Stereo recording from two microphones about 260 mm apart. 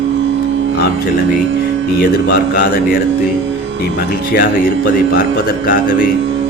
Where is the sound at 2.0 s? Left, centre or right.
Left.